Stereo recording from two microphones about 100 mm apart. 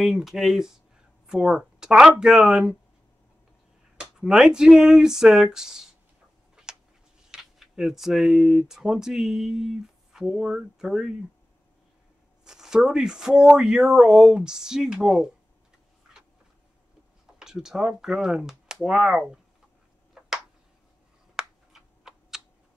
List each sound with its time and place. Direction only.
0.0 s speech: 5° right (ahead or behind)
4.0 s speech: 5° right (ahead or behind)
6.5 s tick-tock: 5° right (ahead or behind)
7.2 s speech: 5° right (ahead or behind)
12.4 s speech: 5° right (ahead or behind)
17.4 s speech: 5° right (ahead or behind)
21.4 s computer keyboard: 5° right (ahead or behind)